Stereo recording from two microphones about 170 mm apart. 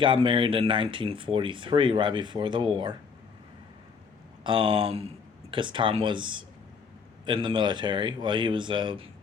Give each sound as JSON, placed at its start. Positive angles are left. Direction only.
{"t": 0.0, "sound": "speech", "side_deg": -30}
{"t": 4.4, "sound": "speech", "side_deg": -30}